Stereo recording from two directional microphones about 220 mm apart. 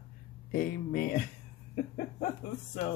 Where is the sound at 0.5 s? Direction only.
40° left (ahead or behind).